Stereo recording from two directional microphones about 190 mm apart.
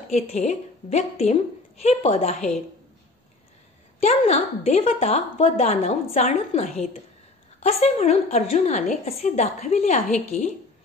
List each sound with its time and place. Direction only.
0.1 s a woman's voice: 35° left (ahead or behind)
4.0 s a woman's voice: 35° left (ahead or behind)